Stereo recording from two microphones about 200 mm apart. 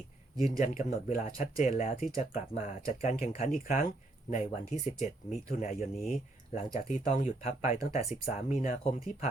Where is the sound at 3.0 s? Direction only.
35° left (ahead or behind).